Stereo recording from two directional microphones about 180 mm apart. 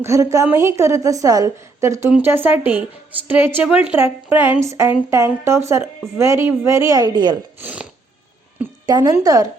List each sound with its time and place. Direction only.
0.0 s a woman's voice: 15° right (ahead or behind)
7.6 s a sound: 5° right (ahead or behind)
8.9 s a woman's voice: 20° right (ahead or behind)